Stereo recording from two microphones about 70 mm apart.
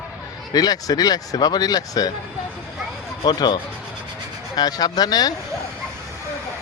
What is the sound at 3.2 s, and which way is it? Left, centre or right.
Speech, left.